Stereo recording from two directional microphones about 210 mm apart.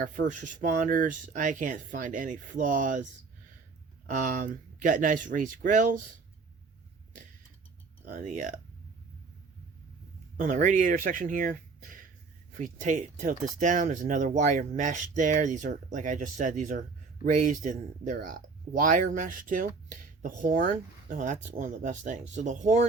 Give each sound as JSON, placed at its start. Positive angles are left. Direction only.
{"t": 0.0, "sound": "speech", "side_deg": -40}
{"t": 4.1, "sound": "speech", "side_deg": -40}
{"t": 8.0, "sound": "speech", "side_deg": -40}
{"t": 10.3, "sound": "speech", "side_deg": -40}